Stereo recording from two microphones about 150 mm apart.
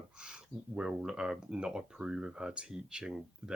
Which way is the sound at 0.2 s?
5° right (ahead or behind).